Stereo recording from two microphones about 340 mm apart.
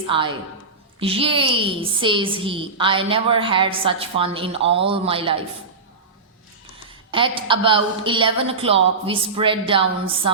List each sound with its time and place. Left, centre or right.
0.1 s a woman's voice: centre
7.1 s a woman's voice: centre